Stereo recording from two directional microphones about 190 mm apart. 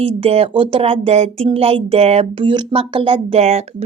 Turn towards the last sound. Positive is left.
turn(degrees=-35)  # may be behind; listen again after turning